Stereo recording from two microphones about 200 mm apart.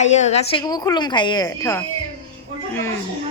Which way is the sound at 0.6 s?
20° left (ahead or behind).